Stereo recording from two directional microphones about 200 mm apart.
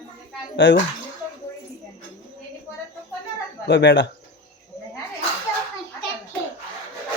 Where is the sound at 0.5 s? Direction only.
65° left (ahead or behind).